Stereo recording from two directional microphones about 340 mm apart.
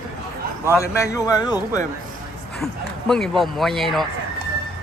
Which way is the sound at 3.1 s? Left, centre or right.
Centre.